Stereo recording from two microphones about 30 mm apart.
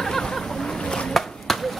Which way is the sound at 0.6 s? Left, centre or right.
Left.